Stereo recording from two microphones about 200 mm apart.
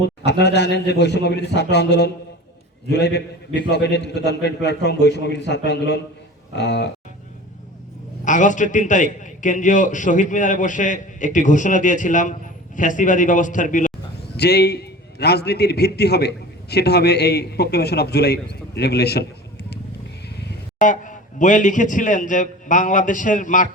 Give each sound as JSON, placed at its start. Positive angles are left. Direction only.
{"t": 0.3, "sound": "a man's voice", "side_deg": 60}
{"t": 8.2, "sound": "a man's voice", "side_deg": 40}
{"t": 14.3, "sound": "a man's voice", "side_deg": 55}
{"t": 20.7, "sound": "a man's voice", "side_deg": 40}